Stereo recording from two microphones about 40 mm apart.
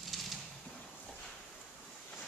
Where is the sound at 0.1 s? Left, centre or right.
Centre.